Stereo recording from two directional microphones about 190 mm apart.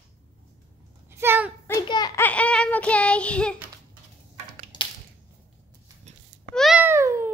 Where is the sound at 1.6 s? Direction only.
20° left (ahead or behind).